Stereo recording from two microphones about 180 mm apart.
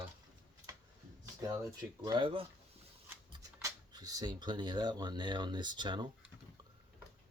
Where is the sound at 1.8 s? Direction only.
25° right (ahead or behind).